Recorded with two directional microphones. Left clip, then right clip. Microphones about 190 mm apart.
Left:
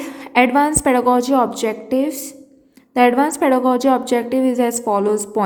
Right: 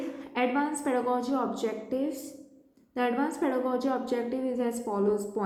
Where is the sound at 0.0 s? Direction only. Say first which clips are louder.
Left 14 dB; 50° left (ahead or behind).